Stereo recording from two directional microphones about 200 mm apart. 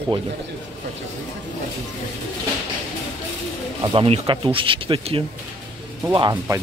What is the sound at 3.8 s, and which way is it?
Speech, 25° right (ahead or behind).